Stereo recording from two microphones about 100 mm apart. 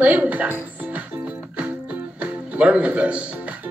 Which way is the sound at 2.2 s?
10° right (ahead or behind).